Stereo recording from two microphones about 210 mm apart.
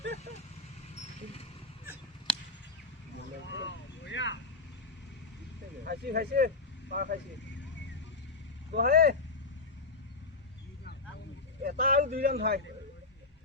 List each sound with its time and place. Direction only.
0.9 s vehicle: 30° left (ahead or behind)
3.4 s vehicle: 60° left (ahead or behind)
5.8 s speech: 50° right (ahead or behind)
8.7 s speech: 45° right (ahead or behind)
11.6 s a sound: 45° right (ahead or behind)